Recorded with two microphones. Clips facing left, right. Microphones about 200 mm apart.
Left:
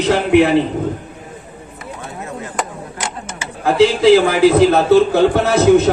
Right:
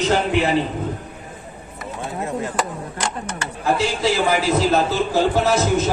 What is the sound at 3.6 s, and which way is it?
A man's voice, 55° left (ahead or behind).